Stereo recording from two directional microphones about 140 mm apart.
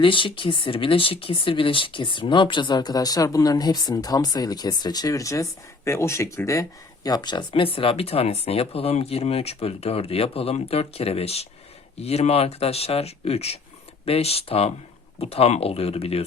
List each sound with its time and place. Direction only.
0.0 s speech: 35° left (ahead or behind)